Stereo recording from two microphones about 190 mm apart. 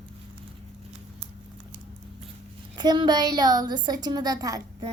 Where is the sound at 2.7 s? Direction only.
25° right (ahead or behind).